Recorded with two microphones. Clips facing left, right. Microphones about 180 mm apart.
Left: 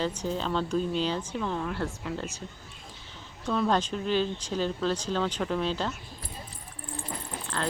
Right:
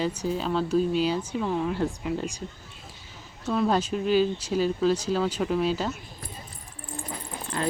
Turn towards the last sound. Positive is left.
turn(degrees=-15)  # may be behind; listen again after turning